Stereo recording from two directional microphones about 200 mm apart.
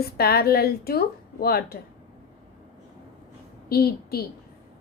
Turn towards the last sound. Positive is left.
turn(degrees=50)  # may be behind; listen again after turning